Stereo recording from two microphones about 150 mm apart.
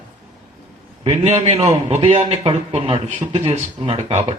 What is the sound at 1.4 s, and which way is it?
A man's voice, 40° right (ahead or behind).